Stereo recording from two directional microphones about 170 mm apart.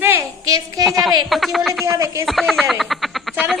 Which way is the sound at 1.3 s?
Centre (ahead or behind).